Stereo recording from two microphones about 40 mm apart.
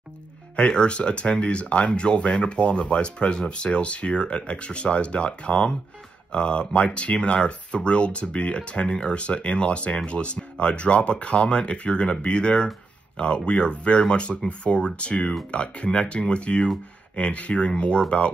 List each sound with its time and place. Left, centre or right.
0.7 s speech: left